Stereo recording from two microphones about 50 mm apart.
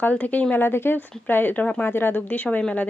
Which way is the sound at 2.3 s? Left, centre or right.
Left.